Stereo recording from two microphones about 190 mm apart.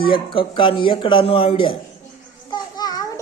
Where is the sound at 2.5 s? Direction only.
20° left (ahead or behind).